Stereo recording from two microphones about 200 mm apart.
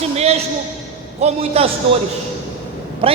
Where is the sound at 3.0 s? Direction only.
25° right (ahead or behind).